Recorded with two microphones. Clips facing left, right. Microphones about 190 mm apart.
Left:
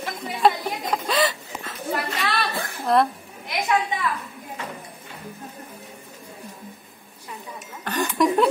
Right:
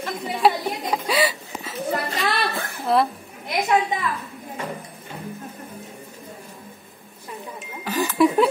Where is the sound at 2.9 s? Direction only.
5° right (ahead or behind).